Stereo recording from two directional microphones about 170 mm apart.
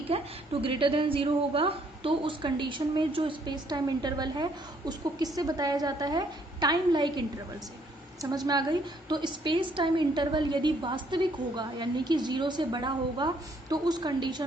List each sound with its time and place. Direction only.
0.1 s a woman's voice: 35° right (ahead or behind)